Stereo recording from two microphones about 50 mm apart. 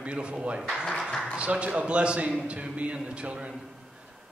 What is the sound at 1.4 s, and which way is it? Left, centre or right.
A man's voice, right.